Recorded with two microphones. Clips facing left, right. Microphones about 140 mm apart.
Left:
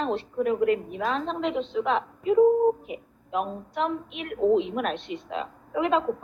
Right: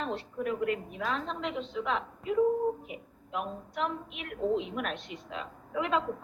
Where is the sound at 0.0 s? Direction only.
25° left (ahead or behind).